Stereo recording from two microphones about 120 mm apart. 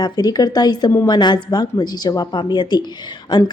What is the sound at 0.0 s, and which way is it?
Speech, 35° left (ahead or behind).